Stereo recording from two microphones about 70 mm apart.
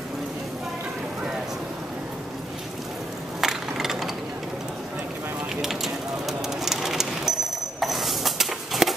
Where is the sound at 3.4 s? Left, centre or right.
Centre.